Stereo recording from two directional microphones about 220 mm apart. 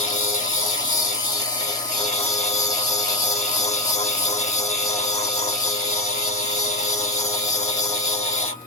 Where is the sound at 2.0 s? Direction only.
30° left (ahead or behind).